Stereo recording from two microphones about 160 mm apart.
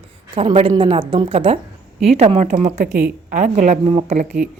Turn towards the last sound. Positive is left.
turn(degrees=-40)  # may be behind; listen again after turning